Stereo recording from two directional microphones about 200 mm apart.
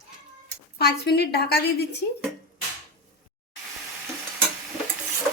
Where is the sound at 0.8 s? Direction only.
55° left (ahead or behind).